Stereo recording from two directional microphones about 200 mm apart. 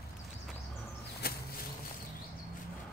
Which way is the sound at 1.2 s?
50° left (ahead or behind).